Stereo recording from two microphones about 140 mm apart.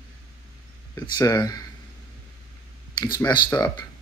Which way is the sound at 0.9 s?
25° left (ahead or behind).